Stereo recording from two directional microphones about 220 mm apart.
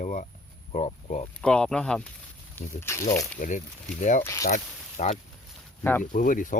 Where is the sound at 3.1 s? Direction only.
35° left (ahead or behind).